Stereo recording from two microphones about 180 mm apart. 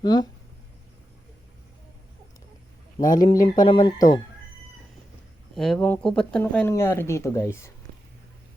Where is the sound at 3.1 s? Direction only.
20° left (ahead or behind).